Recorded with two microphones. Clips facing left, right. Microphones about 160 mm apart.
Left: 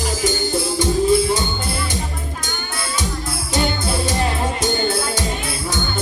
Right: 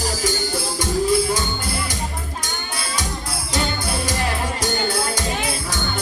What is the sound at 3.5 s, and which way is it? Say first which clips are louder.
Music: left 3 dB; 25° left (ahead or behind).